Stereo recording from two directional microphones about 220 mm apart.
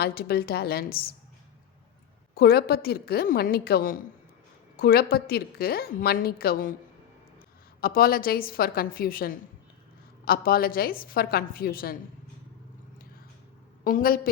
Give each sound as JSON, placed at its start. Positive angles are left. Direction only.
{"t": 0.0, "sound": "a woman's voice", "side_deg": 45}
{"t": 2.3, "sound": "a woman's voice", "side_deg": 45}
{"t": 7.8, "sound": "a woman's voice", "side_deg": 40}
{"t": 13.8, "sound": "a woman's voice", "side_deg": 40}